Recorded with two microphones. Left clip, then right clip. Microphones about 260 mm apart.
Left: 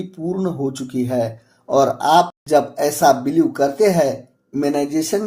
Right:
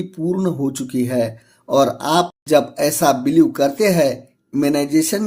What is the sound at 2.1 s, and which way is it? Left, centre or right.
Speech, right.